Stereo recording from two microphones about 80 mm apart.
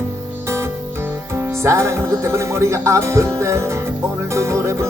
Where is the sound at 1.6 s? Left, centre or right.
Right.